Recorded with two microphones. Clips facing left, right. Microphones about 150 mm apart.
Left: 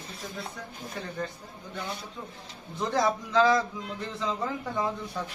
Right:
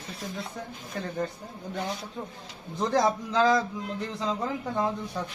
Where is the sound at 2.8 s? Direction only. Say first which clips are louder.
Right 2 dB; 35° right (ahead or behind).